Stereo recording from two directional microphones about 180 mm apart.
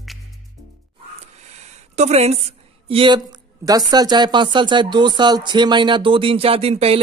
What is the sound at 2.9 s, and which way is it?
A man's voice, 25° right (ahead or behind).